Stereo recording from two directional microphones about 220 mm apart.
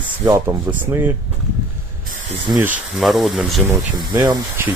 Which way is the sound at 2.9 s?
Centre (ahead or behind).